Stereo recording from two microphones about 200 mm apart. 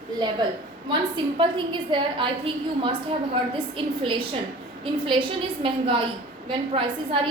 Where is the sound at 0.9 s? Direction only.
25° right (ahead or behind).